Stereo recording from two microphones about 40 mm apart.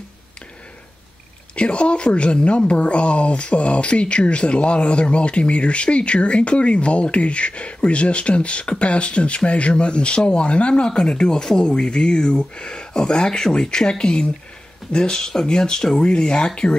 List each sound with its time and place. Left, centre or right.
1.5 s a woman's voice: left